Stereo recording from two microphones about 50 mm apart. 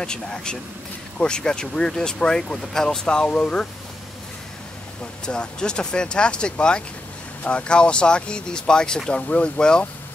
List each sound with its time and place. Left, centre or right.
0.0 s speech: centre
5.2 s speech: centre